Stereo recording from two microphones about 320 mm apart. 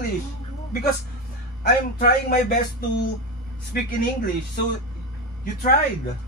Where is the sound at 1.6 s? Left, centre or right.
Left.